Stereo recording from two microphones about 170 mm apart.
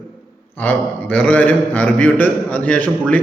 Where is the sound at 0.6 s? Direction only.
10° left (ahead or behind).